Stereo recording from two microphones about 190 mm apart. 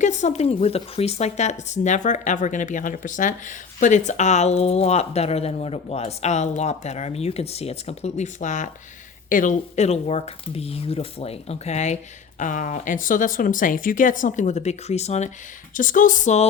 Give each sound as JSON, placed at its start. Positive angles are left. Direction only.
{"t": 0.0, "sound": "speech", "side_deg": 40}